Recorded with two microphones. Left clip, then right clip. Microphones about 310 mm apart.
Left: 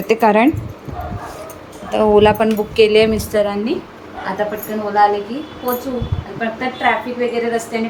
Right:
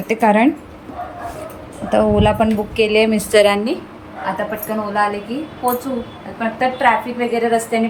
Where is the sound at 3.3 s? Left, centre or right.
Right.